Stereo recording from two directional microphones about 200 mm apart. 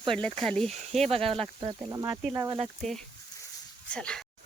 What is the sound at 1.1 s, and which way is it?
Speech, 30° right (ahead or behind).